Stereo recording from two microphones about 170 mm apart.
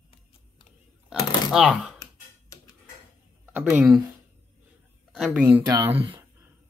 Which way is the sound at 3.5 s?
10° right (ahead or behind).